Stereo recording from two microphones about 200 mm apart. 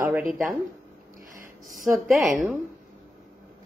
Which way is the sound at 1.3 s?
40° right (ahead or behind).